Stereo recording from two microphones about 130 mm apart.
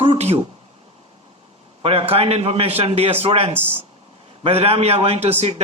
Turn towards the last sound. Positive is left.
turn(degrees=-55)  # may be behind; listen again after turning